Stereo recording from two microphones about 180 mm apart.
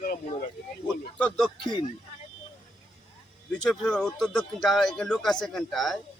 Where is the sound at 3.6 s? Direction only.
5° left (ahead or behind).